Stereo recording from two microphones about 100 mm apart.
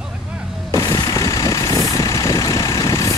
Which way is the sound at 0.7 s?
35° left (ahead or behind).